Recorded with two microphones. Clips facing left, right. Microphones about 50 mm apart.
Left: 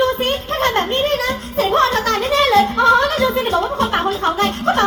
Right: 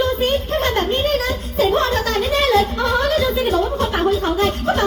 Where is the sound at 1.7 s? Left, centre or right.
Left.